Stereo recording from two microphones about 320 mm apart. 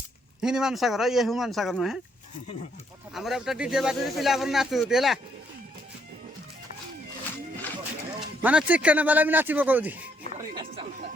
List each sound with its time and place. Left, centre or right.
0.4 s speech: centre
3.2 s speech: centre
8.4 s speech: centre
10.5 s speech: centre